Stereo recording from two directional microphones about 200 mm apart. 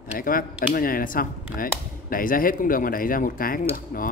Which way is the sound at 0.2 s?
45° left (ahead or behind).